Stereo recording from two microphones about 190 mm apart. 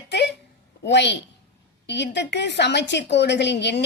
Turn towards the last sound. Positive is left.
turn(degrees=65)  # may be behind; listen again after turning